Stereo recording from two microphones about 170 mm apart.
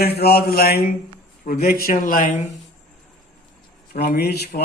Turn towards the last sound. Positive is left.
turn(degrees=70)  # may be behind; listen again after turning